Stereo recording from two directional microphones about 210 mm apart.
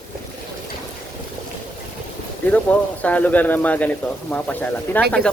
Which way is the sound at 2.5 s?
5° left (ahead or behind).